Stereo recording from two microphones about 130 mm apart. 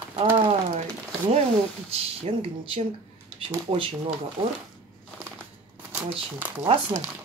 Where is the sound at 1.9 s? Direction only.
50° right (ahead or behind).